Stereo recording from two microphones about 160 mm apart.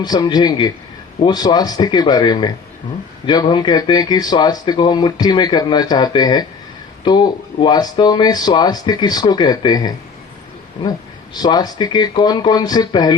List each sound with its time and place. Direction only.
0.0 s speech: 25° left (ahead or behind)